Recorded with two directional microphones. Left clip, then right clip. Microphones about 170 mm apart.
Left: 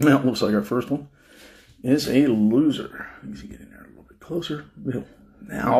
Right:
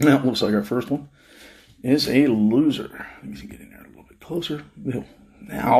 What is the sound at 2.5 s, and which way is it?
Speech, 10° right (ahead or behind).